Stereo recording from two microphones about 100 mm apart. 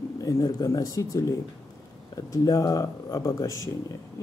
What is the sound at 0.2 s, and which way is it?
Speech, 35° left (ahead or behind).